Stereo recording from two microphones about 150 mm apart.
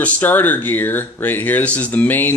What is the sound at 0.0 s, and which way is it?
Speech, 10° left (ahead or behind).